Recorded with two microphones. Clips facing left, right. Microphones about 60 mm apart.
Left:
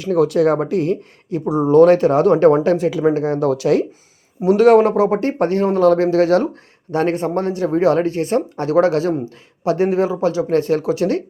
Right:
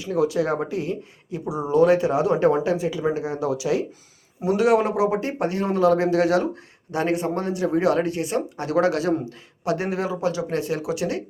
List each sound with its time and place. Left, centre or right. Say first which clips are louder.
0.0 s speech: left 7 dB; left
1.5 s speech: left 7 dB; left
4.4 s speech: left 8 dB; left